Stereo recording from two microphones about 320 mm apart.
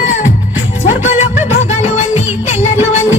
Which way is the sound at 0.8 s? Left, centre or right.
Left.